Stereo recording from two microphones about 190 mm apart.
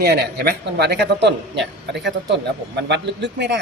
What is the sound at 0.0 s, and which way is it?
Speech, 55° right (ahead or behind).